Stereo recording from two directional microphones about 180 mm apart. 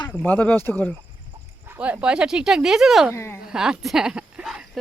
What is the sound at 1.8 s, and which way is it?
Speech, 5° right (ahead or behind).